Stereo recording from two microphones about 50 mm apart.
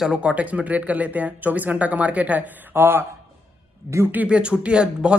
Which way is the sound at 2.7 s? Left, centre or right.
Right.